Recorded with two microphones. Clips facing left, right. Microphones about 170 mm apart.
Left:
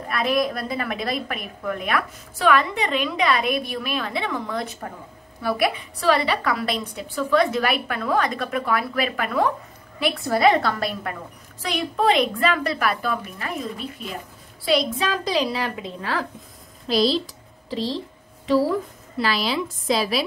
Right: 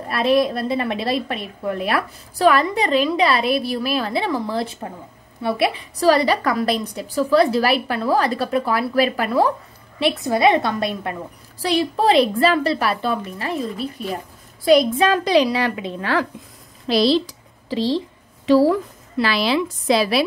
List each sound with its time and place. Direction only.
0.1 s a woman's voice: 30° right (ahead or behind)
5.9 s a woman's voice: 40° right (ahead or behind)
10.2 s a woman's voice: 20° right (ahead or behind)
11.6 s a woman's voice: 35° right (ahead or behind); by 17.2 s 80° right
17.6 s speech: 90° right
19.1 s a woman's voice: 80° right